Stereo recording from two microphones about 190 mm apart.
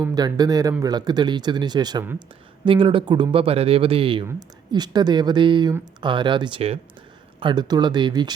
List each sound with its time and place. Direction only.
0.0 s speech: 20° right (ahead or behind)